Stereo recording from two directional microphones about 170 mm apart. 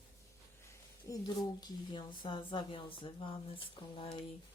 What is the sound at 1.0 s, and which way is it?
Speech, 20° left (ahead or behind).